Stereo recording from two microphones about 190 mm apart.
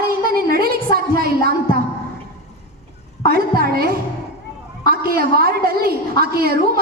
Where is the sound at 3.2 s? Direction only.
55° right (ahead or behind).